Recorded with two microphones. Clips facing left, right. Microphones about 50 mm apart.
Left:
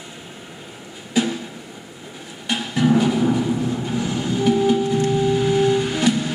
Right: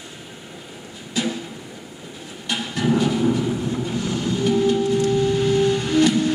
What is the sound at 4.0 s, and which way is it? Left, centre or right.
Train, centre.